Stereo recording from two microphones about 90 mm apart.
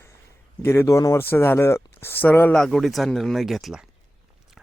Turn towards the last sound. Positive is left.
turn(degrees=-5)  # may be behind; listen again after turning